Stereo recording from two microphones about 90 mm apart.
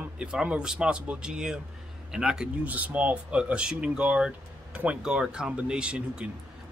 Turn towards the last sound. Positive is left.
turn(degrees=-10)  # may be behind; listen again after turning